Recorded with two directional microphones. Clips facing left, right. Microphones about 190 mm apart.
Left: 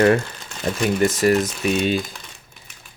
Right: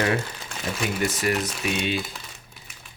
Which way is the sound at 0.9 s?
40° left (ahead or behind).